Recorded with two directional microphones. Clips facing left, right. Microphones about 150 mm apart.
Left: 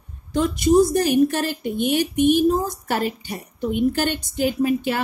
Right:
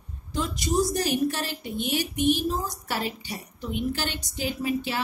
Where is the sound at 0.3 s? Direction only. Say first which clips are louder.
Left 10 dB; 55° left (ahead or behind).